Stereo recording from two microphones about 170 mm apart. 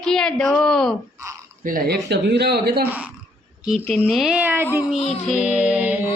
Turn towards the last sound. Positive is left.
turn(degrees=-5)  # may be behind; listen again after turning